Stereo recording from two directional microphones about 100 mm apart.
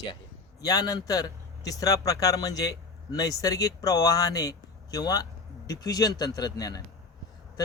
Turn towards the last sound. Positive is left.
turn(degrees=40)  # may be behind; listen again after turning